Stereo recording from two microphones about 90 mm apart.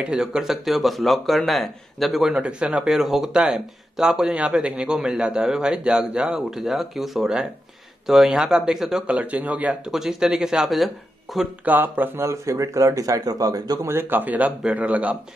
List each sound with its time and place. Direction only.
0.0 s speech: 10° right (ahead or behind)
9.8 s speech: 5° right (ahead or behind)
11.6 s speech: 20° right (ahead or behind); by 13.7 s 45° right (ahead or behind)
13.8 s speech: 25° right (ahead or behind)